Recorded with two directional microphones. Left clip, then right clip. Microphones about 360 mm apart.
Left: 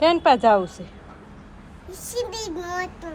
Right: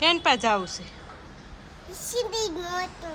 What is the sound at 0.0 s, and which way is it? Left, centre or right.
Speech, centre.